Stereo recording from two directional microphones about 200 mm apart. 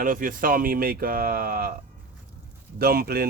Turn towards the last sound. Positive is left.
turn(degrees=-50)  # may be behind; listen again after turning